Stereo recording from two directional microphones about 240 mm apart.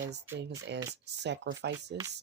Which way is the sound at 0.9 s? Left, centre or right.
Right.